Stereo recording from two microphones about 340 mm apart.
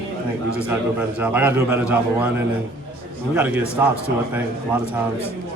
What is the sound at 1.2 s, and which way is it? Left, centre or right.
A man's voice, centre.